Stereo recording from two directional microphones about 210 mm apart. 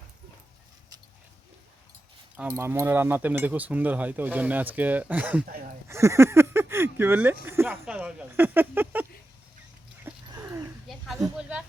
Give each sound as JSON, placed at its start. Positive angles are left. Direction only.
{"t": 2.3, "sound": "speech", "side_deg": -10}
{"t": 5.5, "sound": "speech", "side_deg": -45}
{"t": 5.9, "sound": "speech", "side_deg": -15}
{"t": 10.0, "sound": "dog", "side_deg": -10}
{"t": 10.8, "sound": "a sound", "side_deg": 0}
{"t": 11.3, "sound": "speech", "side_deg": -5}